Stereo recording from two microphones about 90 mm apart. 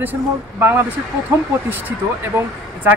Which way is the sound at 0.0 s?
25° right (ahead or behind).